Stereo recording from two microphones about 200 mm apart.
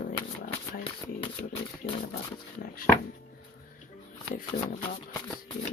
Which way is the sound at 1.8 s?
50° left (ahead or behind).